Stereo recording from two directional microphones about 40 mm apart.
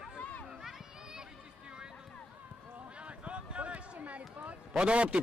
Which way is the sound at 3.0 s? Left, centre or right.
Right.